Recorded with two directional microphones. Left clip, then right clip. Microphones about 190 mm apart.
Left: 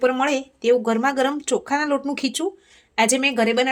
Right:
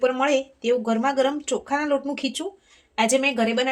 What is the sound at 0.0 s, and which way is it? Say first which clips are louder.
Speech: left 1 dB; 45° left (ahead or behind).